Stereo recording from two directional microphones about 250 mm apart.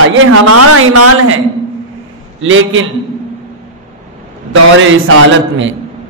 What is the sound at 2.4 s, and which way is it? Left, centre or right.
Speech, right.